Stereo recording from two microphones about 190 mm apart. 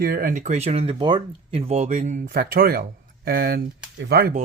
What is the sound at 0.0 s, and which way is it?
Speech, 50° right (ahead or behind).